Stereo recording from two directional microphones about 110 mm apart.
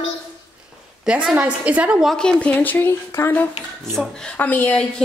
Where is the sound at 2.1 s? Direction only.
5° left (ahead or behind).